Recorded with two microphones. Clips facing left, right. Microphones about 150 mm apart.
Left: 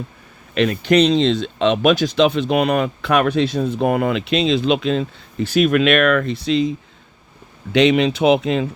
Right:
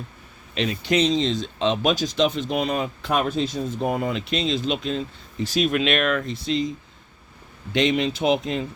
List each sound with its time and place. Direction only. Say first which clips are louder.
0.5 s speech: left 7 dB; 60° left (ahead or behind)
7.7 s speech: left 7 dB; 80° left